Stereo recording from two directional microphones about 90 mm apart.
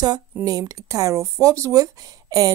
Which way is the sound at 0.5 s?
45° right (ahead or behind).